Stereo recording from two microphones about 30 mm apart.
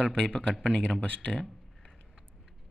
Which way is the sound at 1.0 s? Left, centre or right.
Left.